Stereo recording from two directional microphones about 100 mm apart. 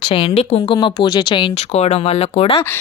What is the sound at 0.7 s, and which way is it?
Speech, 50° left (ahead or behind).